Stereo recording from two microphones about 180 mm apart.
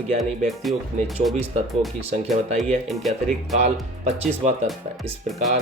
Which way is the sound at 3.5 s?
35° right (ahead or behind).